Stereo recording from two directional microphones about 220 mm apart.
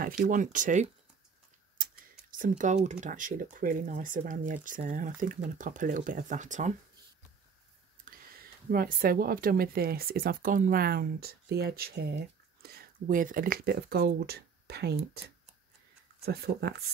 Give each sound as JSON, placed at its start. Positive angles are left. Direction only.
{"t": 0.0, "sound": "speech", "side_deg": -35}
{"t": 2.3, "sound": "speech", "side_deg": -35}
{"t": 8.6, "sound": "speech", "side_deg": -40}
{"t": 16.3, "sound": "speech", "side_deg": -45}